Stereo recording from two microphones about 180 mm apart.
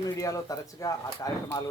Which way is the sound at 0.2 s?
20° left (ahead or behind).